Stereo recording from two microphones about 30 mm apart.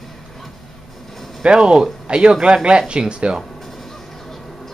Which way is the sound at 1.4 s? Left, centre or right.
Right.